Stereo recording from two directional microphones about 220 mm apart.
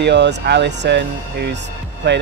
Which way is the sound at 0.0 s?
50° right (ahead or behind).